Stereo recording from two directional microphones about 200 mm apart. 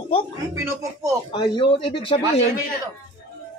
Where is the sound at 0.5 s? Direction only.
15° right (ahead or behind).